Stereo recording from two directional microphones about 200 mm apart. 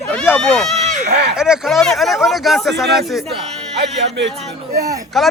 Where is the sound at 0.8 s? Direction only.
35° right (ahead or behind).